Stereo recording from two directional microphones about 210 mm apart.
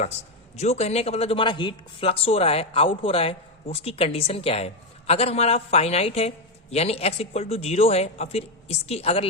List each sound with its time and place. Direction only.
0.5 s speech: 30° left (ahead or behind)